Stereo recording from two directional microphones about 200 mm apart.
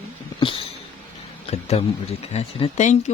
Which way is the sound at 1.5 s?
30° left (ahead or behind).